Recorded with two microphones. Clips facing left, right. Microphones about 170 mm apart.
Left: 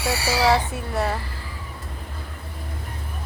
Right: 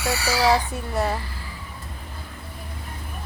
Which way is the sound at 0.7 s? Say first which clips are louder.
Even; centre (ahead or behind).